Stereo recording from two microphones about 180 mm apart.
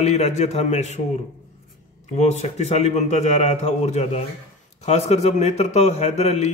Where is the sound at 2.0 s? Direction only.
40° left (ahead or behind).